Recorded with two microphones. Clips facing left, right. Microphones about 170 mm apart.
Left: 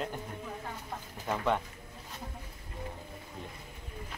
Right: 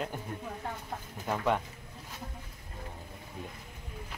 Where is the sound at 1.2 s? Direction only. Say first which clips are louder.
Right 1 dB; 5° right (ahead or behind).